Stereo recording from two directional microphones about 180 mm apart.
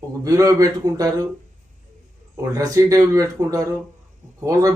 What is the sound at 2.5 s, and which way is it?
A man's voice, 20° right (ahead or behind).